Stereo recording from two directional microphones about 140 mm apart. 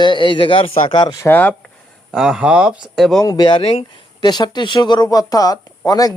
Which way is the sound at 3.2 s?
30° left (ahead or behind).